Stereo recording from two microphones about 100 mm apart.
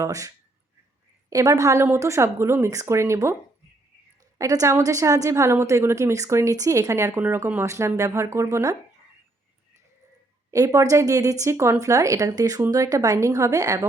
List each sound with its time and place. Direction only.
0.0 s a woman's voice: 35° right (ahead or behind)
4.4 s a woman's voice: 35° right (ahead or behind)
10.5 s speech: 30° right (ahead or behind)